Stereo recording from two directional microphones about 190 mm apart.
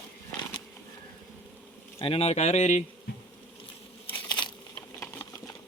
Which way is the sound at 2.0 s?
30° left (ahead or behind).